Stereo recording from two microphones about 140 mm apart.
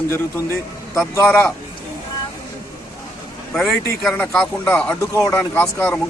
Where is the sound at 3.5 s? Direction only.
Centre (ahead or behind).